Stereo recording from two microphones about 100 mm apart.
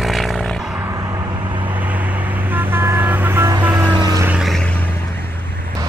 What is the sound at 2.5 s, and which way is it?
Vehicle, 20° right (ahead or behind).